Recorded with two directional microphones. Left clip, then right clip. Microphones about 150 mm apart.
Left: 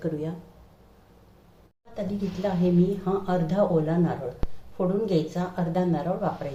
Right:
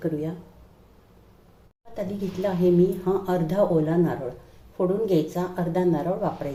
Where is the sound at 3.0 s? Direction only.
25° right (ahead or behind).